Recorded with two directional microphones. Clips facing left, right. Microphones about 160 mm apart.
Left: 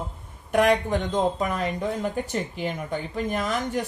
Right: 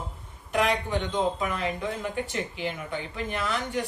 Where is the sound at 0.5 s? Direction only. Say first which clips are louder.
Left 5 dB; 50° left (ahead or behind).